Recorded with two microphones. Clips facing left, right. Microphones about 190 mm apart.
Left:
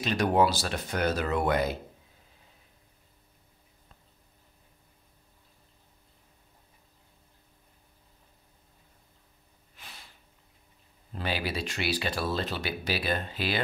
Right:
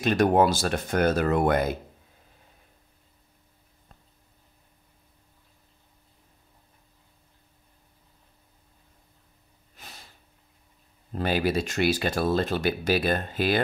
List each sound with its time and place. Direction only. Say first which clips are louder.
0.0 s speech: right 4 dB; 50° right (ahead or behind)
9.8 s sniff: right 3 dB; 40° right (ahead or behind)
11.1 s speech: right 7 dB; 45° right (ahead or behind)